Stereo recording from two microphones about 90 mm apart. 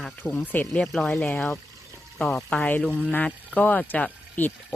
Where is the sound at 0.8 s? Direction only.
5° left (ahead or behind).